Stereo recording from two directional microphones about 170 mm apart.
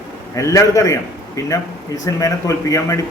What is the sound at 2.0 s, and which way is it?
Speech, 20° left (ahead or behind).